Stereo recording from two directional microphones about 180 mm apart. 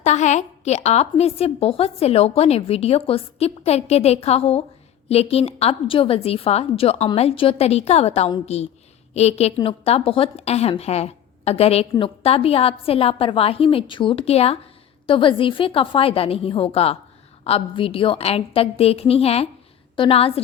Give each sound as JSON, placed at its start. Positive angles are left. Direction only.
{"t": 0.0, "sound": "a woman's voice", "side_deg": 40}